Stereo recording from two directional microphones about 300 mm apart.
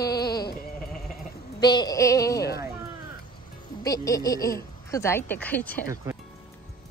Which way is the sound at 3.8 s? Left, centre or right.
Centre.